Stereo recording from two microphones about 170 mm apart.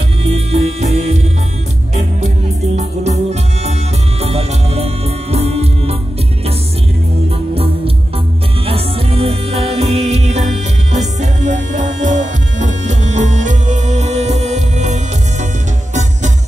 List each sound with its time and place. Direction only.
0.5 s music: 40° right (ahead or behind)
2.7 s music: 40° right (ahead or behind)
7.5 s music: 35° right (ahead or behind)